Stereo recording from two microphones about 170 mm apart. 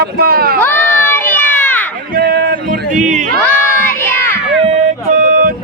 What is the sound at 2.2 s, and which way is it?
Speech, 65° right (ahead or behind).